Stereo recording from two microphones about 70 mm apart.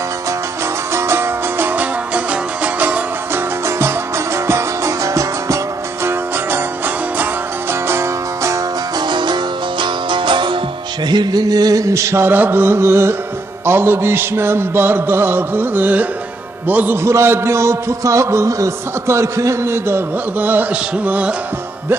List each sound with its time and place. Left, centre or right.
0.9 s music: right
3.7 s music: right
6.0 s music: right
9.0 s music: right
11.1 s a sound: right
12.3 s a man's voice: right
17.0 s a man's voice: right